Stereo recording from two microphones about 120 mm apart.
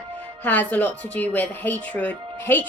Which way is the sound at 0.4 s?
15° left (ahead or behind).